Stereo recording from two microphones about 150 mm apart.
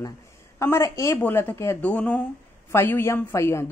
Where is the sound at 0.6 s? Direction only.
20° left (ahead or behind).